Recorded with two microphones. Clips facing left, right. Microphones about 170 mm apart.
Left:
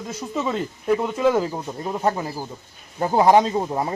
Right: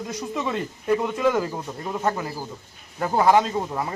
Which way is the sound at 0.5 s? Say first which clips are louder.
Even; 15° left (ahead or behind).